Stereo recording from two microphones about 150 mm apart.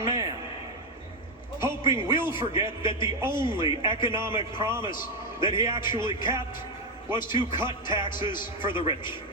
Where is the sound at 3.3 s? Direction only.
30° left (ahead or behind).